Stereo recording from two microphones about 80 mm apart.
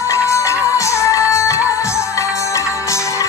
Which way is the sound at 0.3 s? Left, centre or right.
Left.